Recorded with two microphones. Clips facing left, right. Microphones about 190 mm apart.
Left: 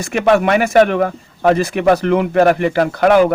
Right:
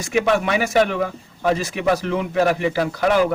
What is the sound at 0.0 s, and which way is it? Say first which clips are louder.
A man's voice: left 5 dB; 60° left (ahead or behind).